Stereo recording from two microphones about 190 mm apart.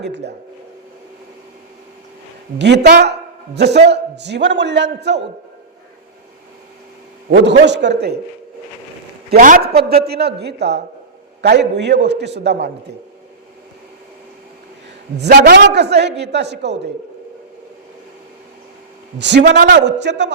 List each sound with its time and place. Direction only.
0.0 s a man's voice: 65° right (ahead or behind)
2.6 s a woman's voice: 65° right (ahead or behind)
7.3 s a man's voice: 65° right (ahead or behind)
9.3 s a man's voice: 50° right (ahead or behind)
15.5 s a man's voice: 65° right (ahead or behind)
19.2 s a man's voice: 65° right (ahead or behind)